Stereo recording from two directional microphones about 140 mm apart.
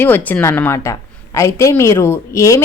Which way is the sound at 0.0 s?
10° left (ahead or behind).